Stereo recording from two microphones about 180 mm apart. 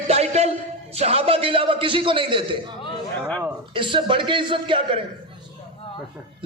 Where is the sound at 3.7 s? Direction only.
25° right (ahead or behind).